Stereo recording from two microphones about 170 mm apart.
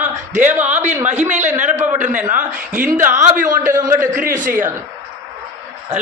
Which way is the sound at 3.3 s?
50° right (ahead or behind).